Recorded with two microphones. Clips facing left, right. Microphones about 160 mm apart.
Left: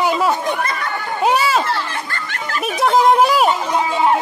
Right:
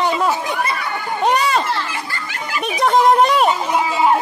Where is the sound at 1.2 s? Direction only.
5° left (ahead or behind).